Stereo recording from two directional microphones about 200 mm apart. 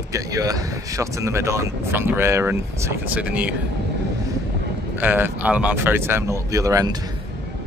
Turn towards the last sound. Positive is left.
turn(degrees=-20)  # may be behind; listen again after turning